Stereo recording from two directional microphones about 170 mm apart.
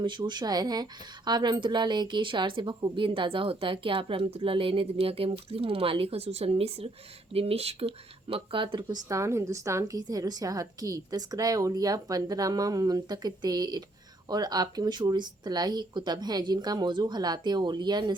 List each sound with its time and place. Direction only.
0.0 s a woman's voice: 30° right (ahead or behind)